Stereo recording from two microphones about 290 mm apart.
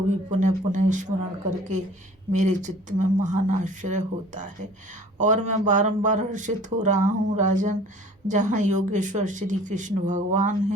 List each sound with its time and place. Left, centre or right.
0.3 s speech: right